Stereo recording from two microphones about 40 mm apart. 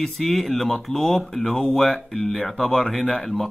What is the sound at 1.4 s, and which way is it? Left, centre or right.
Speech, centre.